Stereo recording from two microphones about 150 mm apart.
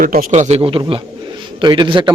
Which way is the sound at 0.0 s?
70° right (ahead or behind).